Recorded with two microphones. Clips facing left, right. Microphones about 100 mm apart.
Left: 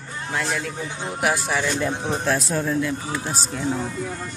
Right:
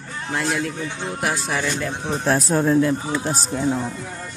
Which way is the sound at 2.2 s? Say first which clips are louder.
Right 7 dB; 40° right (ahead or behind).